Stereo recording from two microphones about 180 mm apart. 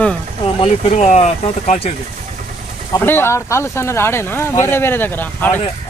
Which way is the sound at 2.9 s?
10° left (ahead or behind).